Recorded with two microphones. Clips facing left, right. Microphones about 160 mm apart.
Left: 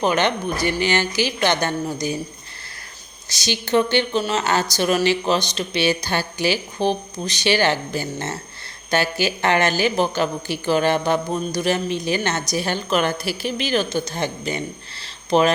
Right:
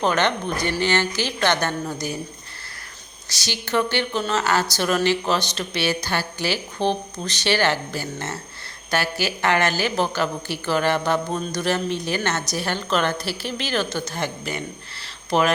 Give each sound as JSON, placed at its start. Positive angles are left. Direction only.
{"t": 0.0, "sound": "speech", "side_deg": 15}
{"t": 3.2, "sound": "speech", "side_deg": 20}
{"t": 15.0, "sound": "a sound", "side_deg": 25}